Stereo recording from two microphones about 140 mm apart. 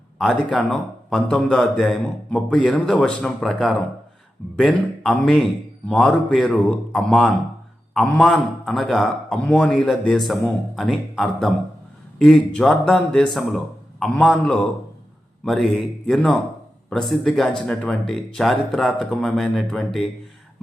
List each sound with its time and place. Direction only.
0.2 s a man's voice: centre (ahead or behind)